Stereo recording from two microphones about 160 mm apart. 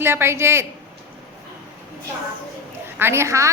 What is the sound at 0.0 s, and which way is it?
Speech, 15° right (ahead or behind).